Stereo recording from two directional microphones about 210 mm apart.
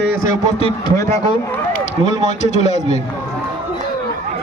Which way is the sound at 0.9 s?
15° left (ahead or behind).